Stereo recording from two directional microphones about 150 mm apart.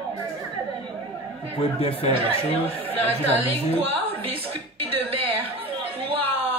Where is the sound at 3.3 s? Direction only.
40° right (ahead or behind).